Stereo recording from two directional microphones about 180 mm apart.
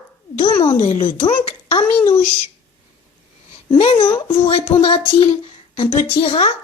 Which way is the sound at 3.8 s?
30° left (ahead or behind).